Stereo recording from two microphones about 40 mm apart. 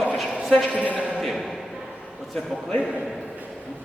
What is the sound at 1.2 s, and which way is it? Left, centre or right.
Speech, centre.